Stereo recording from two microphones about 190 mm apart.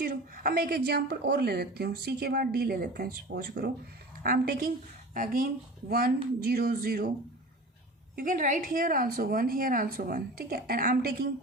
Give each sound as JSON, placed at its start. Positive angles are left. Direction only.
{"t": 0.0, "sound": "a woman's voice", "side_deg": -50}
{"t": 8.1, "sound": "a woman's voice", "side_deg": -45}